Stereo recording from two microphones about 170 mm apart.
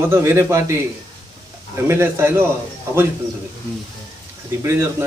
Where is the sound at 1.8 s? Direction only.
15° right (ahead or behind).